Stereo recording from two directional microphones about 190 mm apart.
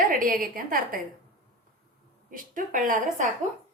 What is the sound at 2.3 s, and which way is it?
Speech, 45° right (ahead or behind).